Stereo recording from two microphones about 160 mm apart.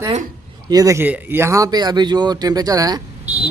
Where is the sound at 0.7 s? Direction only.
20° right (ahead or behind).